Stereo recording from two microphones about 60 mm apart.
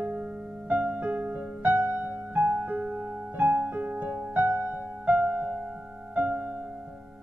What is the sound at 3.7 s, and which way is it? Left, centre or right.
Music, right.